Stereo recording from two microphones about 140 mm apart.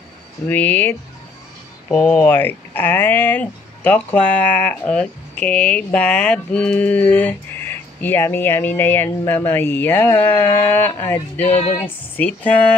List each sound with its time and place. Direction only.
0.5 s speech: 10° left (ahead or behind)
11.5 s music: 55° left (ahead or behind)
12.2 s speech: 10° left (ahead or behind)